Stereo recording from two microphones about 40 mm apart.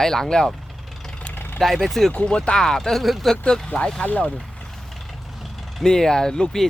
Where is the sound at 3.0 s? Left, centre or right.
Centre.